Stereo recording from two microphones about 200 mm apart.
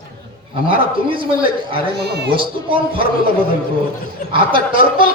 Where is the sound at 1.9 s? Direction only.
55° right (ahead or behind).